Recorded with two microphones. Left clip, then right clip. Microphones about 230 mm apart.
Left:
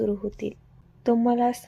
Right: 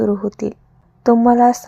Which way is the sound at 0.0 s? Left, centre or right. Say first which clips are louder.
Right 8 dB; right.